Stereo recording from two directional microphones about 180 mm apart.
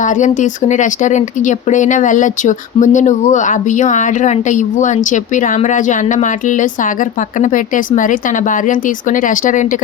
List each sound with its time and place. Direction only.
0.0 s speech: 45° left (ahead or behind)